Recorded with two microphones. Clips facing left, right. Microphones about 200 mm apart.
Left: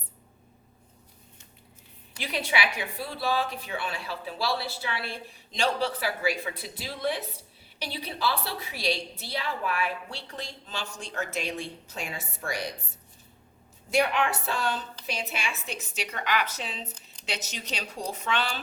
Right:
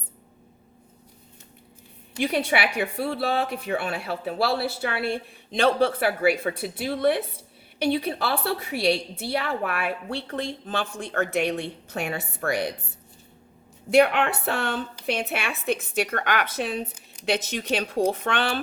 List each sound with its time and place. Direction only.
2.1 s speech: 55° right (ahead or behind)
13.9 s speech: 60° right (ahead or behind)